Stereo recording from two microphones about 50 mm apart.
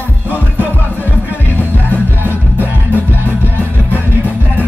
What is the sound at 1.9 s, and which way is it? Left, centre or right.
Music, left.